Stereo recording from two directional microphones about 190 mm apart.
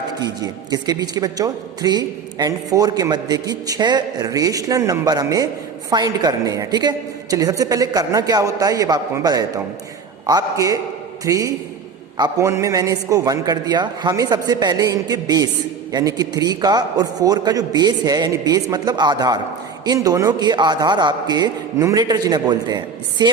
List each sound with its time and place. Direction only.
0.2 s a woman's voice: 20° right (ahead or behind)